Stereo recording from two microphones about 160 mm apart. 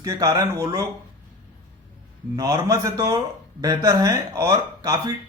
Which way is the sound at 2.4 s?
20° right (ahead or behind).